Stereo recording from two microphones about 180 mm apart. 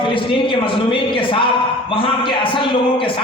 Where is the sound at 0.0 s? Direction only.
30° left (ahead or behind).